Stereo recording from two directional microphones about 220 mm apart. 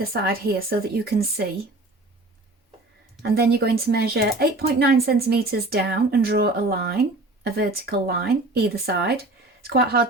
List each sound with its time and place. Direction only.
0.0 s speech: 45° right (ahead or behind)
3.2 s speech: 45° right (ahead or behind)